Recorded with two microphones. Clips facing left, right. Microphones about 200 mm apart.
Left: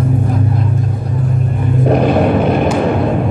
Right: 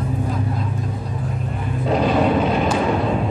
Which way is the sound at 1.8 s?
60° left (ahead or behind).